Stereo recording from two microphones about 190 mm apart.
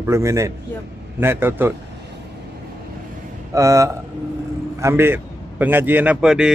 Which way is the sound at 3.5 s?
15° right (ahead or behind).